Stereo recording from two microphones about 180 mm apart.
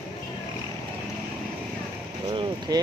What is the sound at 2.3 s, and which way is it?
Vehicle, 30° right (ahead or behind).